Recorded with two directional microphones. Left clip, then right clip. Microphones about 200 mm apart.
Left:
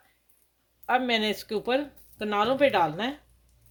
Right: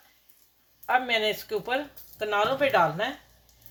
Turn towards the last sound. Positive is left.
turn(degrees=60)  # may be behind; listen again after turning